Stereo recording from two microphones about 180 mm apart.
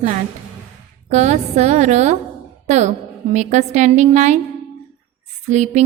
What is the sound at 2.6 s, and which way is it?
Speech, 40° right (ahead or behind).